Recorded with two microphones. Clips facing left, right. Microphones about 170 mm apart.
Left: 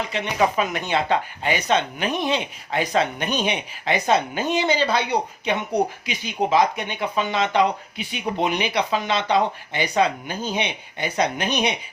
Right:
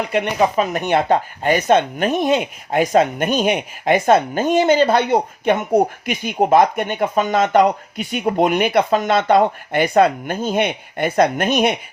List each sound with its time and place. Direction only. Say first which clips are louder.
0.5 s speech: right 5 dB; 40° right (ahead or behind)
0.9 s a woman's voice: right 6 dB; 50° right (ahead or behind)